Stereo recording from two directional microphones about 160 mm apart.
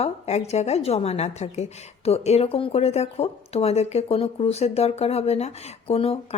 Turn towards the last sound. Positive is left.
turn(degrees=40)  # may be behind; listen again after turning